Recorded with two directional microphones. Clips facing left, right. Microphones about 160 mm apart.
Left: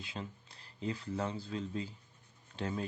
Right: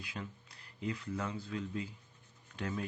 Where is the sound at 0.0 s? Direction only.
25° left (ahead or behind).